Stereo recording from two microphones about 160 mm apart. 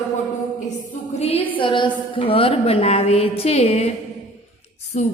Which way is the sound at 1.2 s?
40° left (ahead or behind).